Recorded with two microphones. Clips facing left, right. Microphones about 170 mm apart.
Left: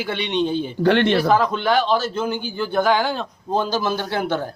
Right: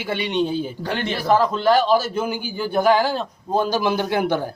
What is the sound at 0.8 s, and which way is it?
Speech, 70° left (ahead or behind).